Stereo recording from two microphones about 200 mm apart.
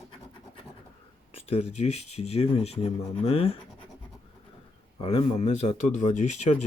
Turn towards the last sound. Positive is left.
turn(degrees=35)  # may be behind; listen again after turning